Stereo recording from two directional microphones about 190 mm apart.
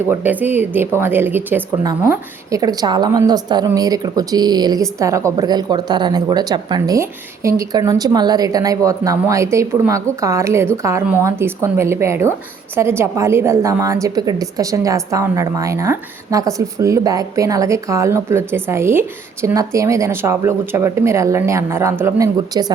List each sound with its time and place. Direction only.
0.1 s a woman's voice: 10° right (ahead or behind)